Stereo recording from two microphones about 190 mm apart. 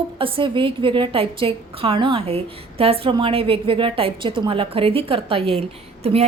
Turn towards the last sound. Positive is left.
turn(degrees=-30)  # may be behind; listen again after turning